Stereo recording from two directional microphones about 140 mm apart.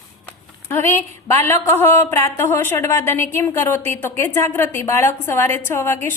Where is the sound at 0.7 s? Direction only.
15° left (ahead or behind).